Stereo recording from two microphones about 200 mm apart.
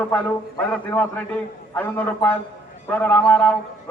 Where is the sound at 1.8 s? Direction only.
10° left (ahead or behind).